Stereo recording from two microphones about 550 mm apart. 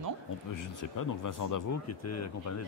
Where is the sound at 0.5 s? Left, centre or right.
Left.